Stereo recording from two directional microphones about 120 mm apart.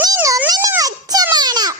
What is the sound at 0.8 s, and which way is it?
Music, 30° right (ahead or behind).